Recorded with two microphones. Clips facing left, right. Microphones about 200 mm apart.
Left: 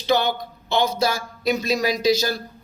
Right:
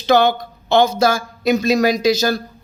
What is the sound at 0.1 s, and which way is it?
Speech, 90° right.